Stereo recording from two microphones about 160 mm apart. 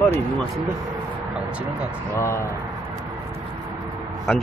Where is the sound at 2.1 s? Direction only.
15° left (ahead or behind).